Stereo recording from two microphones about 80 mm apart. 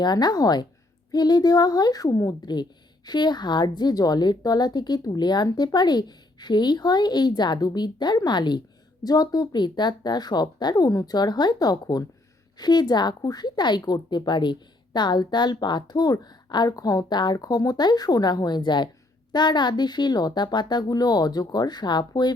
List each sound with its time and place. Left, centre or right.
0.0 s a woman's voice: left
3.1 s a woman's voice: left
9.0 s a woman's voice: left